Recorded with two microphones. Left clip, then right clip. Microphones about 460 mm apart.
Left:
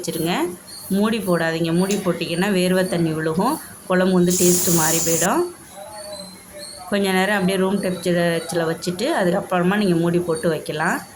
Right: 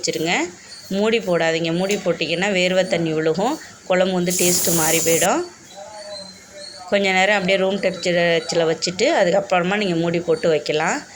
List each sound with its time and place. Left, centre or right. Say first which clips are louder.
0.0 s speech: right 2 dB; left
4.3 s speech: left 1 dB; centre
6.9 s speech: right 3 dB; left